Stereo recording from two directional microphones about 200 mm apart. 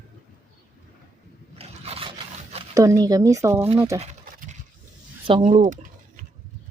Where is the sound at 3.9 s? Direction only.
35° right (ahead or behind).